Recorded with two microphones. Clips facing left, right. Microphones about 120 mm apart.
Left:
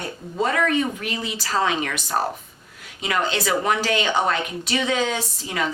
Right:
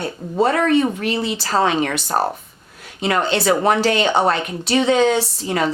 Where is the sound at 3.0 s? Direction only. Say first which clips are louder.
Right 6 dB; 30° right (ahead or behind).